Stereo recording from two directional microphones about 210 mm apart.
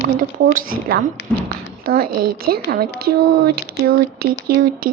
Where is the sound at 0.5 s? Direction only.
45° right (ahead or behind).